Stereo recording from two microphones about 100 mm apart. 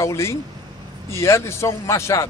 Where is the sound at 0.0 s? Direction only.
30° left (ahead or behind).